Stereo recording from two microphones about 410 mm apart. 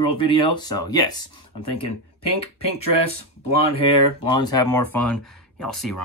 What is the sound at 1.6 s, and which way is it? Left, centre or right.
Speech, left.